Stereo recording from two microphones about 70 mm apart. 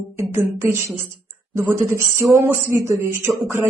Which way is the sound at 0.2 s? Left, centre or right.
Right.